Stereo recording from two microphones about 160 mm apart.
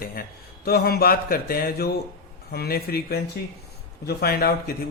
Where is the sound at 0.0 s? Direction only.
65° left (ahead or behind).